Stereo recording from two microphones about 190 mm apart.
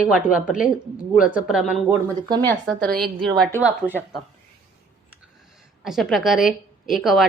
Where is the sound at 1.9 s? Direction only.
20° right (ahead or behind).